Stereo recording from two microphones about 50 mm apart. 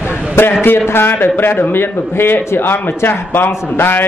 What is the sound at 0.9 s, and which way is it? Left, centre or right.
A man's voice, left.